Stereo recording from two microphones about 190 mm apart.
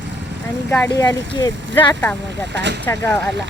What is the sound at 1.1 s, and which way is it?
Speech, 20° left (ahead or behind).